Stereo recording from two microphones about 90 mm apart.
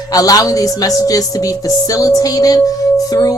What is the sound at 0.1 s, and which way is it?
A woman's voice, 45° left (ahead or behind).